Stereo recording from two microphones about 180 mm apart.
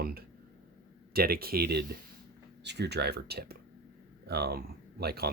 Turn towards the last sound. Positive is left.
turn(degrees=-60)  # may be behind; listen again after turning